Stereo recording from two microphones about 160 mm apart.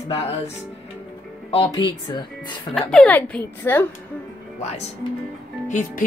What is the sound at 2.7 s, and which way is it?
A woman's voice, 5° left (ahead or behind).